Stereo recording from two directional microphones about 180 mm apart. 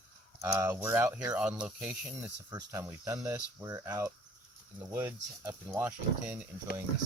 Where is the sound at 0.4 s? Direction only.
15° right (ahead or behind).